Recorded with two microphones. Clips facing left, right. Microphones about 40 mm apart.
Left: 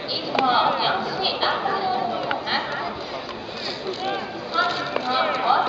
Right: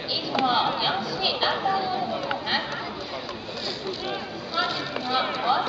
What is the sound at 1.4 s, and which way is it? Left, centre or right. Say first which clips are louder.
Chatter: left 1 dB; centre.